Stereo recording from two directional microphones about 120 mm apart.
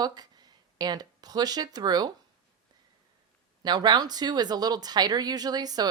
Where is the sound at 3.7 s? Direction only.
35° right (ahead or behind).